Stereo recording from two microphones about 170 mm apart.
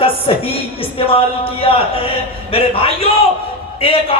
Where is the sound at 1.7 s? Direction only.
30° left (ahead or behind).